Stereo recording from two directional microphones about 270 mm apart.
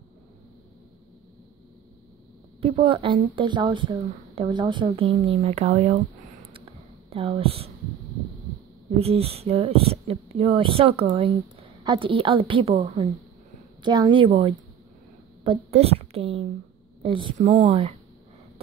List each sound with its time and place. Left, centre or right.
2.6 s speech: right
7.1 s speech: right
8.9 s a woman's voice: right